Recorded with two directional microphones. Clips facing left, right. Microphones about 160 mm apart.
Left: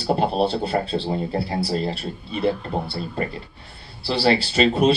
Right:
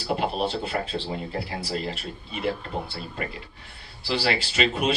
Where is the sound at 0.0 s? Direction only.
35° left (ahead or behind).